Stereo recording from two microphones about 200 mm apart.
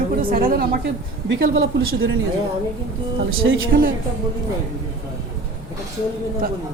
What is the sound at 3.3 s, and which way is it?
Speech, 70° right (ahead or behind).